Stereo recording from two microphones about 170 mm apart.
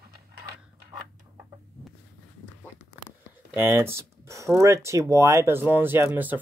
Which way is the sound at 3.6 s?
15° right (ahead or behind).